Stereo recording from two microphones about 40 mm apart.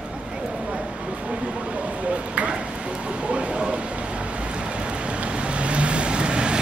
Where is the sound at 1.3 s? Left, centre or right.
Right.